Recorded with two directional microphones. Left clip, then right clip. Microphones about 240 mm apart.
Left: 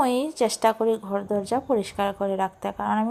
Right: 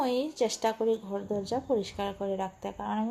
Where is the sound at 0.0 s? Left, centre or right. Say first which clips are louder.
Left 6 dB; left.